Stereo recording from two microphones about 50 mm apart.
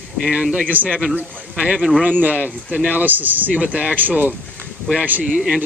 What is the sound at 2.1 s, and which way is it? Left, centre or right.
Speech, right.